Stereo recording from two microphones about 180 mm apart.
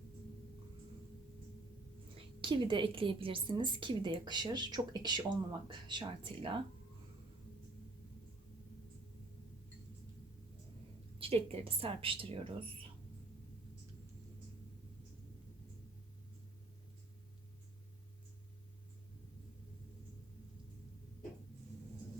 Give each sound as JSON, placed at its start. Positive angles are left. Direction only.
{"t": 2.1, "sound": "a woman's voice", "side_deg": -25}
{"t": 11.2, "sound": "a woman's voice", "side_deg": -30}